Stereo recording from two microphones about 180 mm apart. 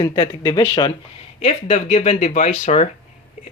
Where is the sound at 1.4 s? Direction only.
40° left (ahead or behind).